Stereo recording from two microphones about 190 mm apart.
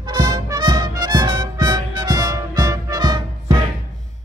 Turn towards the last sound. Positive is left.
turn(degrees=-20)  # may be behind; listen again after turning